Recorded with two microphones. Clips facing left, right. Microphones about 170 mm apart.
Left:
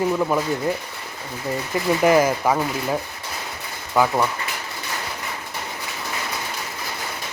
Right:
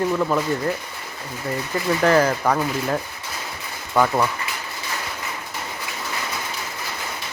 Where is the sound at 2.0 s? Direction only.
10° left (ahead or behind).